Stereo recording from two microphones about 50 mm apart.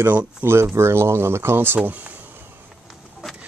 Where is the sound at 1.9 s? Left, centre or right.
Right.